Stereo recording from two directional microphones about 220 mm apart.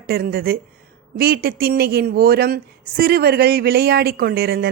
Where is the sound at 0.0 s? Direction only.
45° right (ahead or behind).